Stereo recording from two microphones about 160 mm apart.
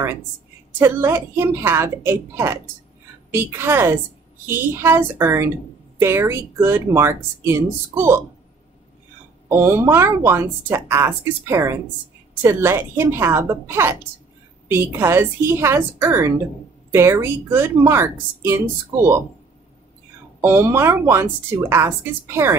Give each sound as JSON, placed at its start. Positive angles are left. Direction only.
{"t": 0.7, "sound": "speech", "side_deg": -15}
{"t": 9.5, "sound": "speech", "side_deg": -15}
{"t": 20.3, "sound": "speech", "side_deg": -15}